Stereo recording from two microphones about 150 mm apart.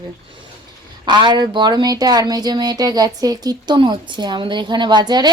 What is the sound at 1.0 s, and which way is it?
Speech, 30° right (ahead or behind).